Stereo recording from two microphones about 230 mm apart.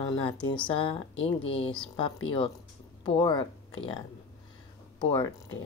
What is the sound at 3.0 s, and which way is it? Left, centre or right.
Speech, centre.